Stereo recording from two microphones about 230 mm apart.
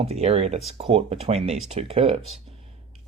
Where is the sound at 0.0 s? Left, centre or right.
Right.